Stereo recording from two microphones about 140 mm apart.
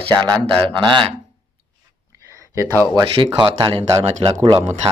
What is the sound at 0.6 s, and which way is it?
Speech, 40° right (ahead or behind).